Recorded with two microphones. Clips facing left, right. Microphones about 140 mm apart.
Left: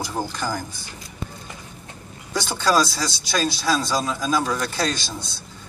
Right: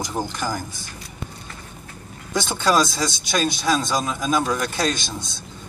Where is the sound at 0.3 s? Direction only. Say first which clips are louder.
Even; 15° right (ahead or behind).